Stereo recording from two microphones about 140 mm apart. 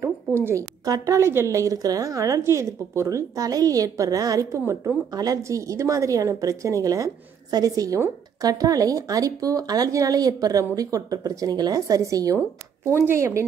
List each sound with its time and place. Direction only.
0.5 s a woman's voice: 25° right (ahead or behind)